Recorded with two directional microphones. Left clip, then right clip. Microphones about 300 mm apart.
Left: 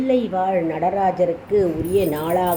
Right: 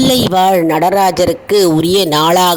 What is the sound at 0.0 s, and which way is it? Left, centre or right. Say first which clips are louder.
Speech: right 9 dB; right.